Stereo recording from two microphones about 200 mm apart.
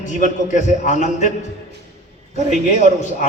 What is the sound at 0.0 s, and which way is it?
A man's voice, 40° left (ahead or behind).